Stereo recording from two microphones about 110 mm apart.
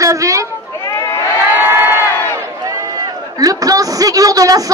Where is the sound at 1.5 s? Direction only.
20° right (ahead or behind).